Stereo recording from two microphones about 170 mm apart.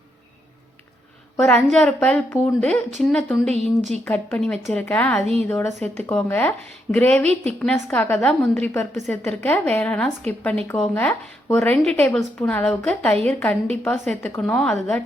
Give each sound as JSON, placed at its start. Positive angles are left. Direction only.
{"t": 1.5, "sound": "speech", "side_deg": 5}
{"t": 3.5, "sound": "speech", "side_deg": -40}
{"t": 4.0, "sound": "speech", "side_deg": 5}
{"t": 5.2, "sound": "speech", "side_deg": -40}
{"t": 5.5, "sound": "speech", "side_deg": 10}